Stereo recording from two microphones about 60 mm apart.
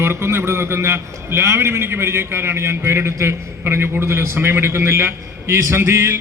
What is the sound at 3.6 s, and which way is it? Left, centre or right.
A man's voice, right.